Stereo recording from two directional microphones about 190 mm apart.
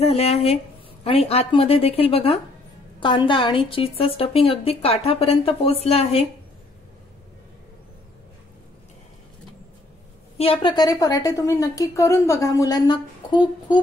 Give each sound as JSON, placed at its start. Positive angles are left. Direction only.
{"t": 0.0, "sound": "a woman's voice", "side_deg": 35}
{"t": 10.3, "sound": "a woman's voice", "side_deg": 30}